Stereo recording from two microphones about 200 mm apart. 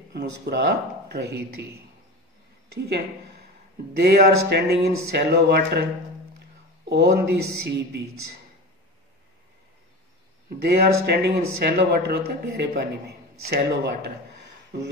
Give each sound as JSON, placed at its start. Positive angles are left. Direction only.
{"t": 0.1, "sound": "speech", "side_deg": -55}
{"t": 4.0, "sound": "speech", "side_deg": -55}
{"t": 6.9, "sound": "speech", "side_deg": -55}
{"t": 10.6, "sound": "speech", "side_deg": -55}